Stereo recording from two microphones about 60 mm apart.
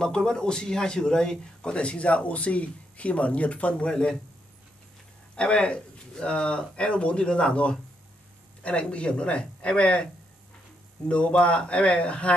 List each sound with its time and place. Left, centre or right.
0.0 s a man's voice: centre
5.3 s a man's voice: centre
11.1 s speech: centre